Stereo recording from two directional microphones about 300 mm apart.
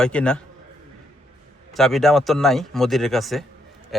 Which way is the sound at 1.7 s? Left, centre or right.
Centre.